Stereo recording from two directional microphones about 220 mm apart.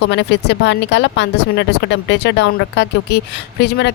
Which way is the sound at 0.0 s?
50° left (ahead or behind).